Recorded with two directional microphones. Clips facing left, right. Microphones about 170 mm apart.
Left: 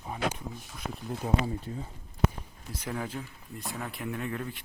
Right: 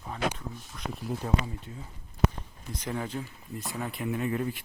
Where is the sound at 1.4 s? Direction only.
35° left (ahead or behind).